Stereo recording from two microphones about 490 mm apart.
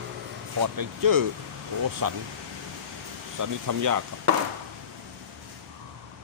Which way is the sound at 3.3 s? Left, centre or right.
Right.